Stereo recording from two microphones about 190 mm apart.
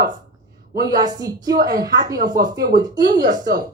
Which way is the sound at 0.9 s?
20° right (ahead or behind).